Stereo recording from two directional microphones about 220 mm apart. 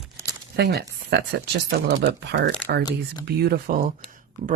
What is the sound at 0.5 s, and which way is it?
Speech, 50° right (ahead or behind).